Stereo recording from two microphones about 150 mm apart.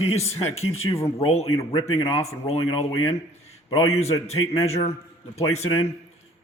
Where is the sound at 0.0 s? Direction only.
45° left (ahead or behind).